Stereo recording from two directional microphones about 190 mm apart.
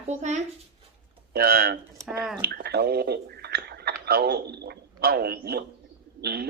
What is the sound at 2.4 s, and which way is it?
A man's voice, 60° right (ahead or behind).